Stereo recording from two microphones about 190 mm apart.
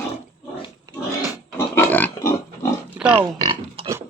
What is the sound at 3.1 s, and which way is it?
Pig, 30° right (ahead or behind).